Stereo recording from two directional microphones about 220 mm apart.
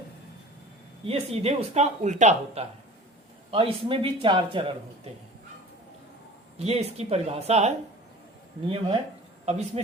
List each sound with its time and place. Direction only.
1.0 s a man's voice: 25° right (ahead or behind)
6.6 s a man's voice: 30° right (ahead or behind)
9.5 s speech: 30° right (ahead or behind)